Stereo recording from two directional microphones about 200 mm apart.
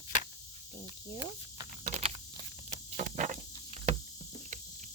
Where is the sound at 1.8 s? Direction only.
35° right (ahead or behind).